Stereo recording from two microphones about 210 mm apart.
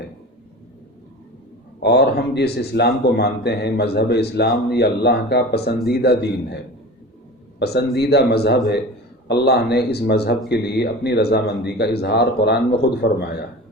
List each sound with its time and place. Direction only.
1.8 s speech: 50° left (ahead or behind)
7.6 s speech: 50° left (ahead or behind)